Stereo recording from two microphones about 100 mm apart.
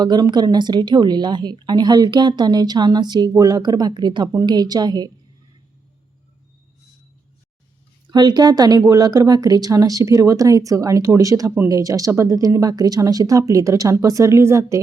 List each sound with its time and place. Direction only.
0.0 s a woman's voice: 45° right (ahead or behind)
8.1 s a woman's voice: 45° right (ahead or behind); by 14.8 s 30° right (ahead or behind)